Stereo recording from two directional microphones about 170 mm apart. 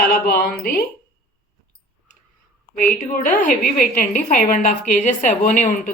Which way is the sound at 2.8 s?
55° left (ahead or behind).